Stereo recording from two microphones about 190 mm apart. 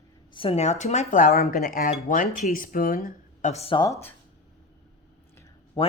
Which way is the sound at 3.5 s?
30° left (ahead or behind).